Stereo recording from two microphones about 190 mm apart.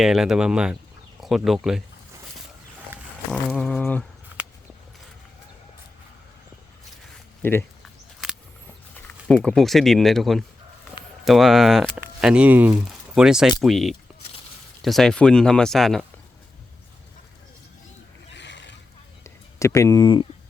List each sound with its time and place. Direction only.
0.0 s speech: centre (ahead or behind)
3.5 s speech: 5° left (ahead or behind)
7.4 s speech: 10° left (ahead or behind)
9.3 s speech: 5° left (ahead or behind)
18.3 s boat: 70° left (ahead or behind)
19.2 s speech: 15° left (ahead or behind)